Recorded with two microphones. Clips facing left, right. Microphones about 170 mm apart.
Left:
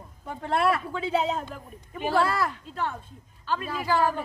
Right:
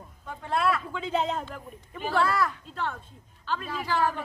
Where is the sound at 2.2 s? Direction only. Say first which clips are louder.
Even; 30° left (ahead or behind).